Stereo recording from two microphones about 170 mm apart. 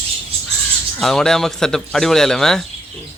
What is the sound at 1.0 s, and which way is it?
Speech, centre (ahead or behind).